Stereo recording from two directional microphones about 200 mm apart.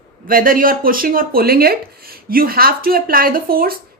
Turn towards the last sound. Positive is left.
turn(degrees=-45)  # may be behind; listen again after turning